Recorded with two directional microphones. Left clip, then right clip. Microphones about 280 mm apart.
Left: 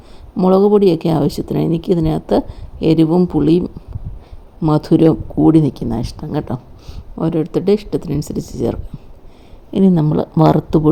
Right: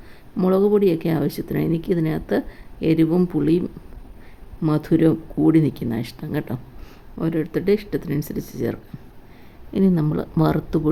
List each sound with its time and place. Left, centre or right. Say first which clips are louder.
0.3 s speech: left 6 dB; centre